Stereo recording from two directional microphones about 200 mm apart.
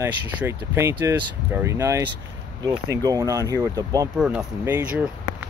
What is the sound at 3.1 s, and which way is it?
Speech, 15° right (ahead or behind).